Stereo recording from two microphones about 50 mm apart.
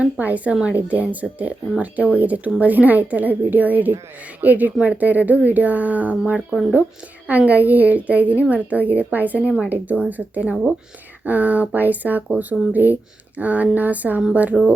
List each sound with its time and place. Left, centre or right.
0.0 s speech: right